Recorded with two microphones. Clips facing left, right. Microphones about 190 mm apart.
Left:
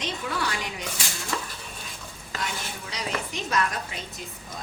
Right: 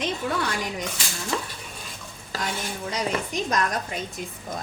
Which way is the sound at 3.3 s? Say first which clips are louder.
Even; 45° right (ahead or behind).